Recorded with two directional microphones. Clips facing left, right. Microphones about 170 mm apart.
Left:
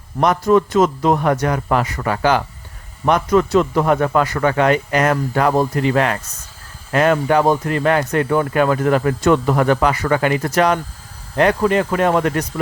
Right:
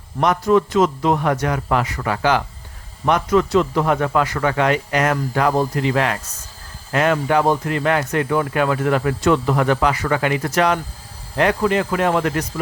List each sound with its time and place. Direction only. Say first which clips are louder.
0.2 s a man's voice: left 2 dB; 40° left (ahead or behind)